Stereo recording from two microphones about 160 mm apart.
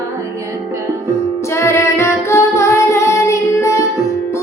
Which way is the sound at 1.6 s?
15° left (ahead or behind).